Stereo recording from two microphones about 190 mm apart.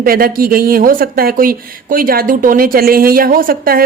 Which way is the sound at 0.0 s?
50° right (ahead or behind).